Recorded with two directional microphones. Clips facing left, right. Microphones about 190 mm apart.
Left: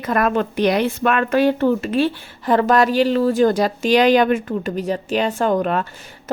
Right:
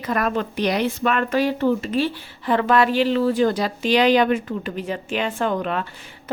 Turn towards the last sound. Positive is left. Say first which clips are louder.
# left 4 dB
turn(degrees=45)  # may be behind; listen again after turning